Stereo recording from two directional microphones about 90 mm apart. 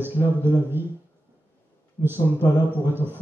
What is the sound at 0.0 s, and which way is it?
Speech, 25° right (ahead or behind).